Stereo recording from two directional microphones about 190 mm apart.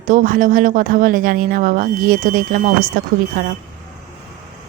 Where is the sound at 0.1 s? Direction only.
45° right (ahead or behind).